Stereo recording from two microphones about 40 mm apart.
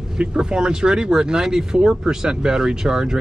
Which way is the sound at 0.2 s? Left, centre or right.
Right.